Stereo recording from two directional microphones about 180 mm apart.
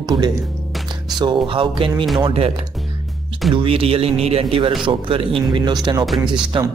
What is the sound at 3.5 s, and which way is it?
Speech, 30° right (ahead or behind).